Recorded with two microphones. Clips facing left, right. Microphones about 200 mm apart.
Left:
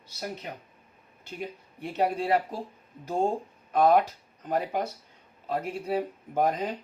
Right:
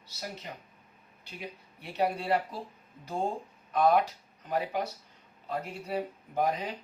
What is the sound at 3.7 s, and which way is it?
Speech, 50° left (ahead or behind).